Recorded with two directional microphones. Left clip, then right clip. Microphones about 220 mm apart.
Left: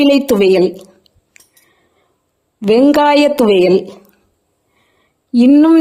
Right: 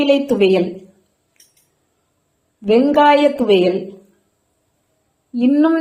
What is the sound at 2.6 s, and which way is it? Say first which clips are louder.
Speech: left 3 dB; 45° left (ahead or behind).